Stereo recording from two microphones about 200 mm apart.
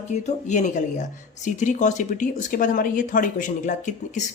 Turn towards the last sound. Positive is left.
turn(degrees=40)  # may be behind; listen again after turning